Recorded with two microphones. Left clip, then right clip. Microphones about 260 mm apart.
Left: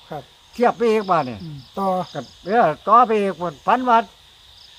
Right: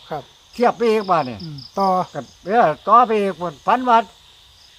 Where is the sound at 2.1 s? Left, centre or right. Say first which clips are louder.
Right 1 dB; centre.